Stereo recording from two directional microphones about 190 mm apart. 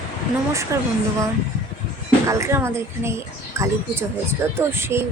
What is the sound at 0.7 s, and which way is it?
Speech, 15° right (ahead or behind).